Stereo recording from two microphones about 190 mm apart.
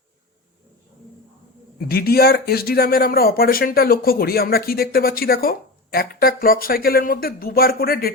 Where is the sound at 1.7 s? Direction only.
55° left (ahead or behind).